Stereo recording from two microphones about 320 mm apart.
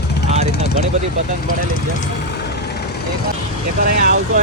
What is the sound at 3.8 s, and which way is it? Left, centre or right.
Speech, right.